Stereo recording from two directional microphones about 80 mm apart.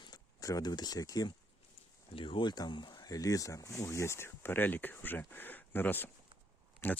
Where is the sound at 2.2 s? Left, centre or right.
Left.